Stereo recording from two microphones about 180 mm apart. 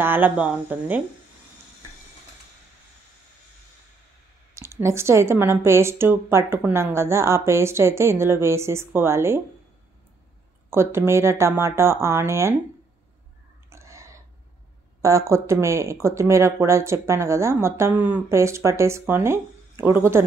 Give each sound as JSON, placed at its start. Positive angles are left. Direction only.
{"t": 0.0, "sound": "speech", "side_deg": -10}
{"t": 4.6, "sound": "speech", "side_deg": -15}
{"t": 10.7, "sound": "speech", "side_deg": -15}
{"t": 13.7, "sound": "whispering", "side_deg": -15}
{"t": 15.0, "sound": "speech", "side_deg": -15}